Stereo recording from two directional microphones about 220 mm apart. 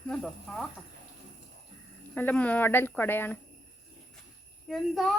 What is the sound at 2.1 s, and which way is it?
Speech, 5° left (ahead or behind).